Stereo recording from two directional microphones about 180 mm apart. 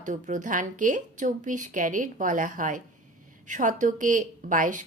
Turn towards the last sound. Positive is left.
turn(degrees=-45)  # may be behind; listen again after turning